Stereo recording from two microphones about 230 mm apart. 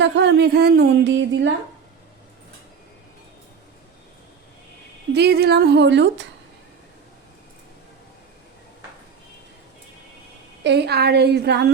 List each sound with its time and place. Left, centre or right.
0.0 s speech: right
5.1 s a woman's voice: right
10.6 s a woman's voice: right